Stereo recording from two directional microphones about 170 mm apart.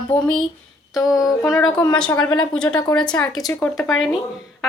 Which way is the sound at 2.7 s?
20° left (ahead or behind).